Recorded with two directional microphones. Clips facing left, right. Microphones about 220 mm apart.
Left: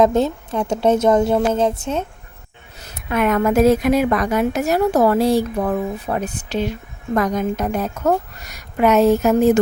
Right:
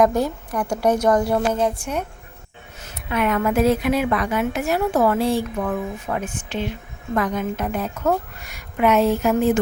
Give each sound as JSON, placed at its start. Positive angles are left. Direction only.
{"t": 0.0, "sound": "a woman's voice", "side_deg": 25}
{"t": 2.8, "sound": "a woman's voice", "side_deg": 45}